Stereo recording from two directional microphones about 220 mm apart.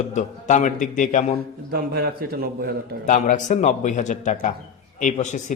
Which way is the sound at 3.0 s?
35° left (ahead or behind).